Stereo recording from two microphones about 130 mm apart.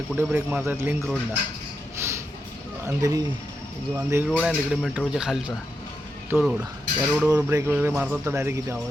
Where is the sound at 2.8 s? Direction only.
25° right (ahead or behind).